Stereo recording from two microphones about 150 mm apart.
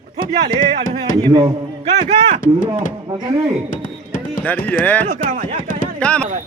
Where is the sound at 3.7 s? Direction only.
60° left (ahead or behind).